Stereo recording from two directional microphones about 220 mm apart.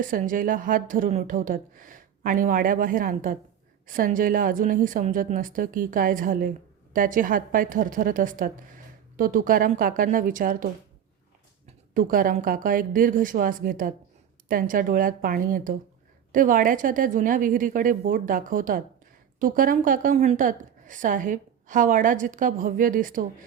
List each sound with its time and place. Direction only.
0.0 s a woman's voice: 40° right (ahead or behind)